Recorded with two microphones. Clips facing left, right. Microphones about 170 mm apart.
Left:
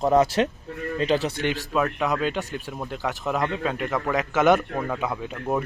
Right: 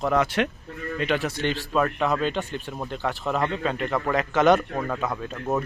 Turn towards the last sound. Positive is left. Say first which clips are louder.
# even
turn(degrees=10)  # may be behind; listen again after turning